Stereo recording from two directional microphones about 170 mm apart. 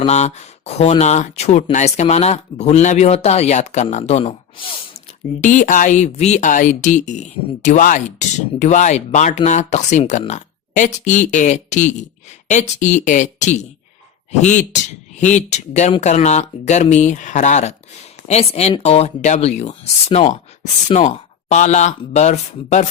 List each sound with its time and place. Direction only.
0.0 s speech: 40° left (ahead or behind)
5.4 s speech: 45° left (ahead or behind)